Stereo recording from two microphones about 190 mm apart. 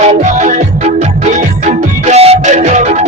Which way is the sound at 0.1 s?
40° right (ahead or behind).